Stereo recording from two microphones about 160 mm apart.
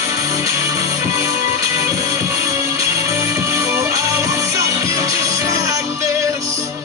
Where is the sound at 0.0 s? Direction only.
20° right (ahead or behind).